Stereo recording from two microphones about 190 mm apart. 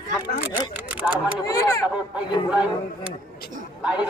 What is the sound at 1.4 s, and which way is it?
Speech, 20° left (ahead or behind).